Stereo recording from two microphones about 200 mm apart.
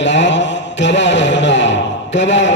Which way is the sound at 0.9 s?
65° left (ahead or behind).